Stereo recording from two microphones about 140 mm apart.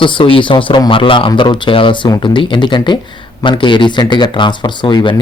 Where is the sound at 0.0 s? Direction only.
40° left (ahead or behind).